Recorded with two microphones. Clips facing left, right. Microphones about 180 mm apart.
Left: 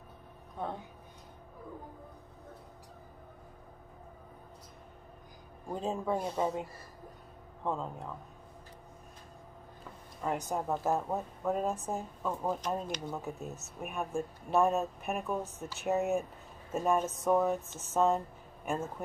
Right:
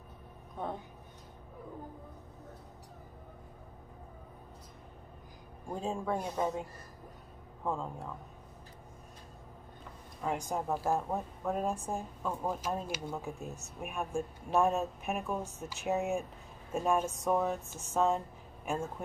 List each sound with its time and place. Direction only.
5.7 s speech: centre (ahead or behind)
7.6 s speech: centre (ahead or behind)
10.2 s speech: centre (ahead or behind)
13.2 s speech: centre (ahead or behind)